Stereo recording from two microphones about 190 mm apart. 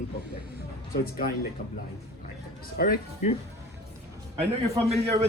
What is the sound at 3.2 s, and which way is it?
Speech, 40° left (ahead or behind).